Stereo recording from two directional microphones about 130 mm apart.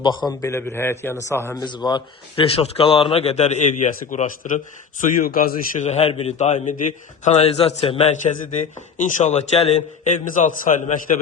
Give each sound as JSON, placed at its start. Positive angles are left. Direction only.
{"t": 0.0, "sound": "a man's voice", "side_deg": 35}
{"t": 0.4, "sound": "a man's voice", "side_deg": 20}
{"t": 1.5, "sound": "a man's voice", "side_deg": 35}
{"t": 8.2, "sound": "a man's voice", "side_deg": 75}
{"t": 10.6, "sound": "a man's voice", "side_deg": 80}